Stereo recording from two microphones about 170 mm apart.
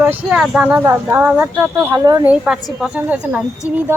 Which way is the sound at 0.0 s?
10° right (ahead or behind).